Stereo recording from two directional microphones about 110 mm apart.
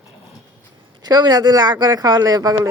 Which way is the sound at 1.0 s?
40° right (ahead or behind).